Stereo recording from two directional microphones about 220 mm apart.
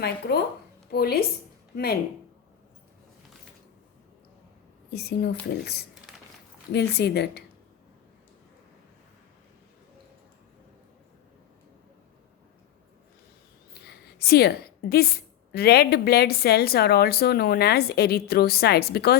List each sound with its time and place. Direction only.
0.9 s a woman's voice: 45° left (ahead or behind)
4.9 s a woman's voice: 45° left (ahead or behind)
13.8 s a woman's voice: 45° left (ahead or behind)